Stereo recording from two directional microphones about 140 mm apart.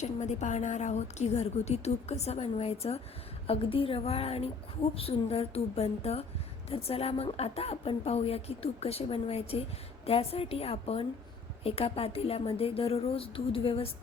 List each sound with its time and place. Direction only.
0.0 s a woman's voice: 55° left (ahead or behind)